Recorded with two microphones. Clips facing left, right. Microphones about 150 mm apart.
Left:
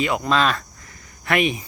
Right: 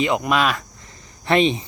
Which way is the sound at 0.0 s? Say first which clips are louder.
Right 1 dB; 20° right (ahead or behind).